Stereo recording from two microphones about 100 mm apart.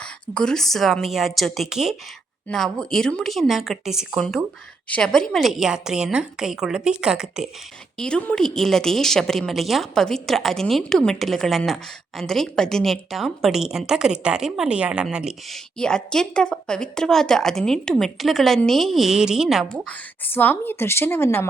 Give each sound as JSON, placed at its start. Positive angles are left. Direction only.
{"t": 0.0, "sound": "a woman's voice", "side_deg": 5}
{"t": 4.9, "sound": "a woman's voice", "side_deg": 10}
{"t": 7.9, "sound": "a woman's voice", "side_deg": 10}
{"t": 15.8, "sound": "a woman's voice", "side_deg": 10}
{"t": 19.7, "sound": "a woman's voice", "side_deg": 15}